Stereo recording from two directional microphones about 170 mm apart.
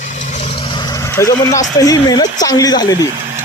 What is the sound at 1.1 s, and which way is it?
Speech, 20° left (ahead or behind).